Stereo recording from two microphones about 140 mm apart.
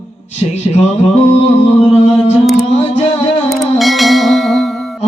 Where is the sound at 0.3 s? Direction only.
55° left (ahead or behind).